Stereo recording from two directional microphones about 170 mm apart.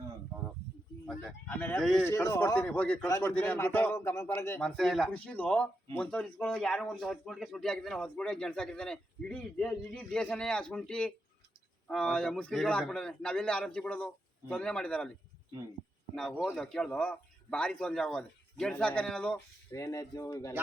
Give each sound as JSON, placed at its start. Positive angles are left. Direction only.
{"t": 1.0, "sound": "speech", "side_deg": 5}
{"t": 2.0, "sound": "a man's voice", "side_deg": 15}
{"t": 4.8, "sound": "a man's voice", "side_deg": 0}
{"t": 16.1, "sound": "a man's voice", "side_deg": 0}
{"t": 19.7, "sound": "speech", "side_deg": 20}